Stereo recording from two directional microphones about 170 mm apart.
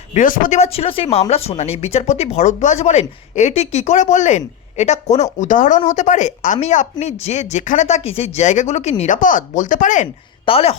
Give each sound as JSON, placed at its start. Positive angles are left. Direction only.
{"t": 0.1, "sound": "speech", "side_deg": 50}
{"t": 0.6, "sound": "speech", "side_deg": 35}
{"t": 10.4, "sound": "speech", "side_deg": 35}